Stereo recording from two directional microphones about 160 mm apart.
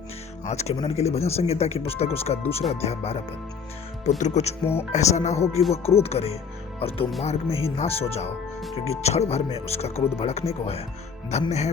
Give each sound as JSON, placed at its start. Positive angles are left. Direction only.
{"t": 0.4, "sound": "speech", "side_deg": 45}
{"t": 4.2, "sound": "speech", "side_deg": 45}
{"t": 4.6, "sound": "speech", "side_deg": 15}
{"t": 4.9, "sound": "speech", "side_deg": 45}